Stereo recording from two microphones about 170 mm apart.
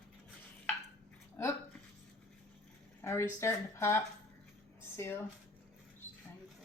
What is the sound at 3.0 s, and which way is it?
Speech, 15° left (ahead or behind).